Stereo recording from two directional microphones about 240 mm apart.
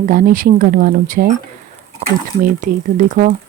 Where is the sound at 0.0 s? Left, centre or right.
Right.